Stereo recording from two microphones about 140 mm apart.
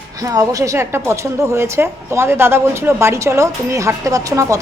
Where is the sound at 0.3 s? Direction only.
20° right (ahead or behind).